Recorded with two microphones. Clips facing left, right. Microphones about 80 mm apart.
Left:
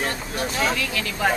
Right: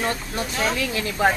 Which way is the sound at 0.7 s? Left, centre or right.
Right.